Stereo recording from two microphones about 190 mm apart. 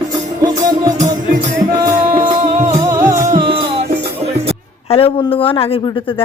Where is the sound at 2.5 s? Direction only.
35° right (ahead or behind).